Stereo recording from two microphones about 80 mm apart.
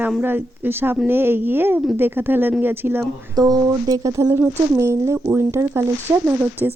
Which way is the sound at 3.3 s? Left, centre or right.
Right.